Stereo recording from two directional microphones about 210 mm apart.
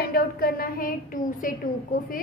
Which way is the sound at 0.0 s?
45° left (ahead or behind).